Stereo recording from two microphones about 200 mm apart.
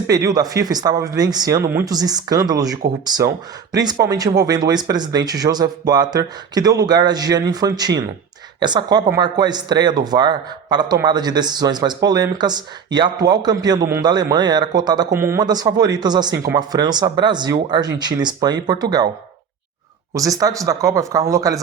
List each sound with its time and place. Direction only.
0.1 s speech: 20° right (ahead or behind)
20.1 s speech: 15° right (ahead or behind)